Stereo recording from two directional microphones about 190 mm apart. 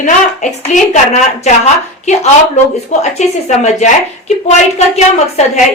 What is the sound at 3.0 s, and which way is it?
Speech, 35° left (ahead or behind).